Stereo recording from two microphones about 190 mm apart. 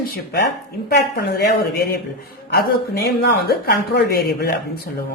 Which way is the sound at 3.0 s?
55° left (ahead or behind).